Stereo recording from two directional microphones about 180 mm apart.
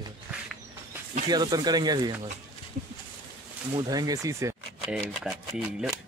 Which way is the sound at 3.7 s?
20° right (ahead or behind).